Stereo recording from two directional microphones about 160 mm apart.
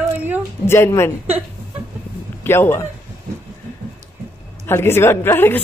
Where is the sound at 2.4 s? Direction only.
15° left (ahead or behind).